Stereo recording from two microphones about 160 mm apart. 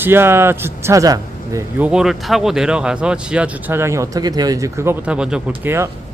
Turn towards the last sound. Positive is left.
turn(degrees=-15)  # may be behind; listen again after turning